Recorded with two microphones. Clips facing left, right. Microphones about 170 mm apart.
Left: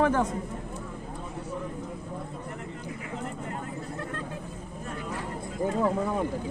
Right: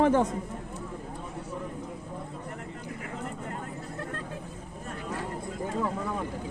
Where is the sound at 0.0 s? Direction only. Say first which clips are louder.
Right 2 dB; 25° right (ahead or behind).